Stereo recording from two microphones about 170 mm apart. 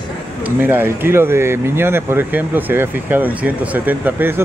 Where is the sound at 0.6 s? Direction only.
10° right (ahead or behind).